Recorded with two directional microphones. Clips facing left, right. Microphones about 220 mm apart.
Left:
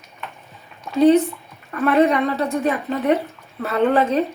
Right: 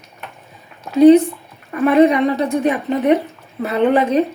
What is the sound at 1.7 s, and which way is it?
Speech, 15° right (ahead or behind).